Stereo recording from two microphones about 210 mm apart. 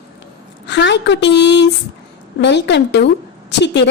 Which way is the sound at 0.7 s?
55° left (ahead or behind).